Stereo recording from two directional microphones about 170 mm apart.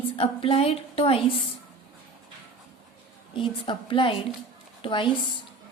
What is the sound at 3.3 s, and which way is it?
A woman's voice, 30° left (ahead or behind).